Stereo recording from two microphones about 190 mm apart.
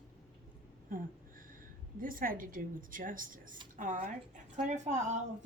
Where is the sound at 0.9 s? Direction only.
45° right (ahead or behind).